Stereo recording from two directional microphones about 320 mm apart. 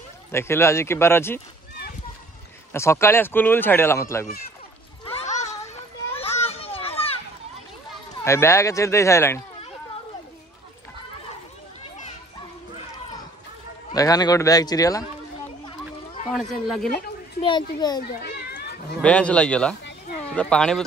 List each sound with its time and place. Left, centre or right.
0.3 s speech: centre
2.7 s speech: centre
5.0 s a sound: left
6.1 s children playing: centre
8.2 s speech: centre
13.9 s speech: centre
16.3 s speech: centre
17.4 s speech: centre
18.0 s a child's voice: left
18.6 s a sound: left
18.9 s speech: centre